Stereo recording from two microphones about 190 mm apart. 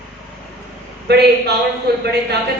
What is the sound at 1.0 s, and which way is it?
Speech, 60° right (ahead or behind).